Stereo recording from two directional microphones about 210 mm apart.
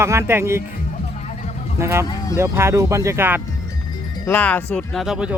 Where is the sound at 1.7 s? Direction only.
10° right (ahead or behind).